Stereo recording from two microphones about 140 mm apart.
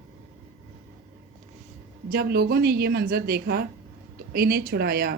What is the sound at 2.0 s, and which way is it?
A woman's voice, 90° right.